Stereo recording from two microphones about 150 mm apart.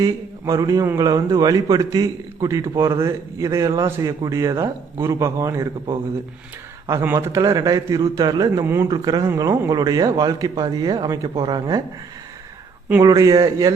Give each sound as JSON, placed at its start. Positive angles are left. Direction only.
{"t": 0.0, "sound": "speech", "side_deg": -25}
{"t": 6.8, "sound": "speech", "side_deg": -15}
{"t": 13.0, "sound": "speech", "side_deg": -25}